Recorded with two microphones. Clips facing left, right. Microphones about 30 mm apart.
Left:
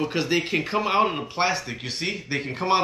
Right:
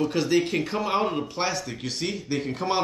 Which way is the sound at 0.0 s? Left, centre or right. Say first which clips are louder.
Right 1 dB; left.